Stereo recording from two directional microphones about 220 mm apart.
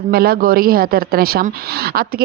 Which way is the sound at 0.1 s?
40° right (ahead or behind).